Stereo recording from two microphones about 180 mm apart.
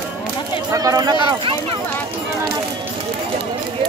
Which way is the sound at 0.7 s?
20° right (ahead or behind).